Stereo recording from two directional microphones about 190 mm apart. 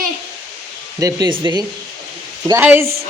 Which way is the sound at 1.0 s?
20° right (ahead or behind).